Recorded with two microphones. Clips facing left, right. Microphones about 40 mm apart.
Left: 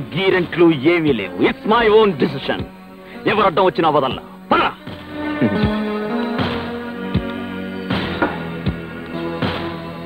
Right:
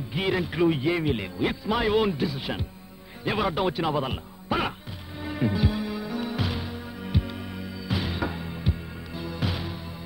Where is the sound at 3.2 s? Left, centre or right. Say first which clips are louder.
Left 11 dB; left.